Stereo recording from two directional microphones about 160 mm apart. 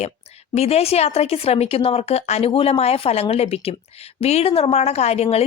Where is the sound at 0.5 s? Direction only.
40° left (ahead or behind).